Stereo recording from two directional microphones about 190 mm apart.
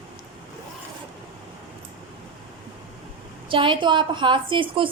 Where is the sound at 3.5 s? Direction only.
25° right (ahead or behind).